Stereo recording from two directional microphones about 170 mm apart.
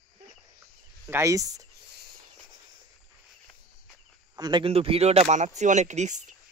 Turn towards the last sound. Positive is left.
turn(degrees=-45)  # may be behind; listen again after turning